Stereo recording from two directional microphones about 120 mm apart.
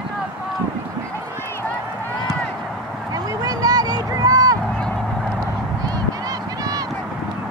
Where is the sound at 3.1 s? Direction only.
30° right (ahead or behind).